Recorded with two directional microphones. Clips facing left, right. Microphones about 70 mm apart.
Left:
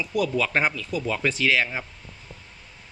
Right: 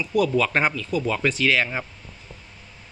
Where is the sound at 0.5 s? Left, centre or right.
Centre.